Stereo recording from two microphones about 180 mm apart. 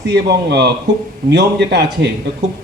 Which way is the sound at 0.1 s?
65° right (ahead or behind).